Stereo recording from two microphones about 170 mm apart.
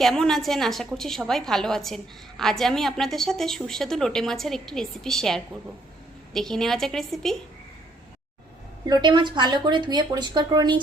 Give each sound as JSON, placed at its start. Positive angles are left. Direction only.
{"t": 0.0, "sound": "a woman's voice", "side_deg": 0}
{"t": 8.9, "sound": "speech", "side_deg": -25}